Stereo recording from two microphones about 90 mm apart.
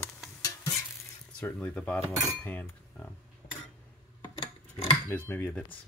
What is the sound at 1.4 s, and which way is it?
Speech, 20° left (ahead or behind).